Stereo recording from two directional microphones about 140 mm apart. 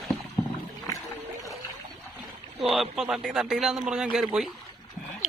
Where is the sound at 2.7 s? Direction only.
Centre (ahead or behind).